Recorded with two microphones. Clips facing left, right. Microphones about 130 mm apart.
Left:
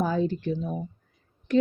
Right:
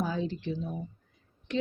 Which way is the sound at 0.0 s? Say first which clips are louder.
Left 6 dB; 50° left (ahead or behind).